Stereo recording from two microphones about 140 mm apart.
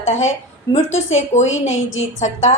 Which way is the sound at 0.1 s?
55° left (ahead or behind).